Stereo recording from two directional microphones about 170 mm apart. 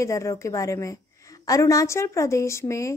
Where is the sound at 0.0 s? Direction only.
20° left (ahead or behind).